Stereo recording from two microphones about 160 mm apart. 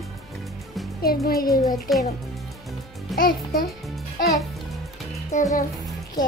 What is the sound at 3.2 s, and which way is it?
Speech, 65° left (ahead or behind).